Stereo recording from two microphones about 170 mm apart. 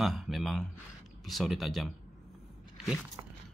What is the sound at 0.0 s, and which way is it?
Speech, centre (ahead or behind).